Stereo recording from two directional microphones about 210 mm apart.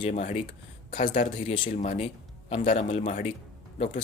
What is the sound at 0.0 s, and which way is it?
Speech, 30° left (ahead or behind).